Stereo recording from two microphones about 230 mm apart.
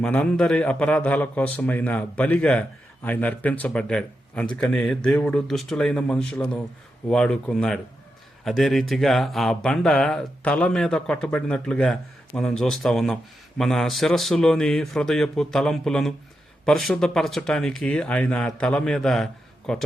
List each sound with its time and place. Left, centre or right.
0.0 s a man's voice: centre